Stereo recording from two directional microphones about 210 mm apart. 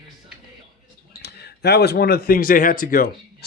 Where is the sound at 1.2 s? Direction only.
50° left (ahead or behind).